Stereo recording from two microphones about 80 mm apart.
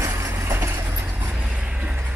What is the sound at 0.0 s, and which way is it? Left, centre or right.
Vehicle, right.